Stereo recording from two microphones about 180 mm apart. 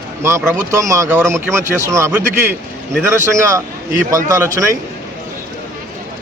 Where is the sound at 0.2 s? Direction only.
15° right (ahead or behind).